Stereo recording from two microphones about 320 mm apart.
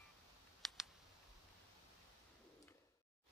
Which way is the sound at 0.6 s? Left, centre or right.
Centre.